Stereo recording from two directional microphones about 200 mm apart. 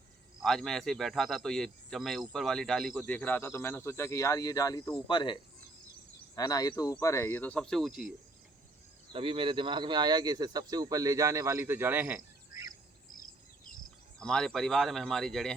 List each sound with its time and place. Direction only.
0.4 s speech: centre (ahead or behind)
9.1 s speech: 25° right (ahead or behind); by 12.6 s 10° right (ahead or behind)
14.2 s speech: centre (ahead or behind)